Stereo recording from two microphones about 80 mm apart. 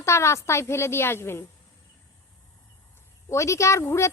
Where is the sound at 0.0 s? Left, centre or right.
Left.